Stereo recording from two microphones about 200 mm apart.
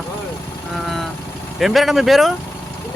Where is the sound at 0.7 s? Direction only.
Centre (ahead or behind).